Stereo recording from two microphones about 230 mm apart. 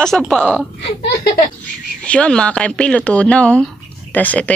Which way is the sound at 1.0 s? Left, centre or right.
Left.